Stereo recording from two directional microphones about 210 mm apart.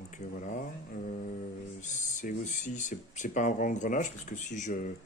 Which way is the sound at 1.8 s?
35° left (ahead or behind).